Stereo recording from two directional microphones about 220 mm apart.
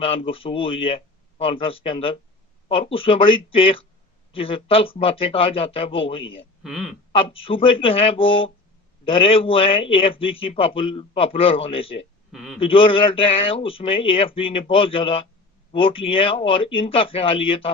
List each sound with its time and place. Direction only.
0.0 s a man's voice: 25° left (ahead or behind)
6.6 s speech: centre (ahead or behind)
7.1 s a man's voice: 25° left (ahead or behind)
12.3 s a man's voice: centre (ahead or behind)
12.5 s a man's voice: 25° left (ahead or behind)